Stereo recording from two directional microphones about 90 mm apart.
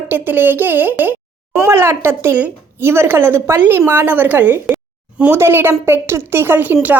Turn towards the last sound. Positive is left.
turn(degrees=-20)  # may be behind; listen again after turning